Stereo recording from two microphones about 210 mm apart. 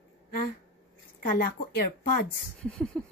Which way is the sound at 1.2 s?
45° left (ahead or behind).